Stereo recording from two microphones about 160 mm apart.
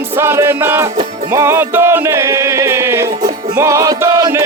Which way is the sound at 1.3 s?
15° right (ahead or behind).